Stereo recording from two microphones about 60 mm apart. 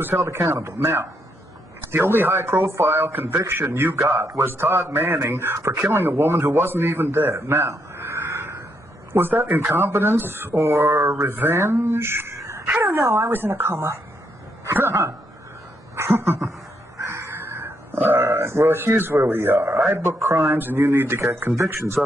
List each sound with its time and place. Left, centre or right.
0.0 s speech: right
7.3 s a sound: right
9.1 s speech: right
13.3 s speech: right
16.0 s speech: right